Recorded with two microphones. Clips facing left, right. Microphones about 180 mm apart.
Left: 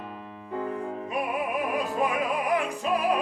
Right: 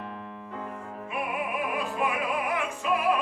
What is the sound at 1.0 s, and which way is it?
Music, 40° left (ahead or behind).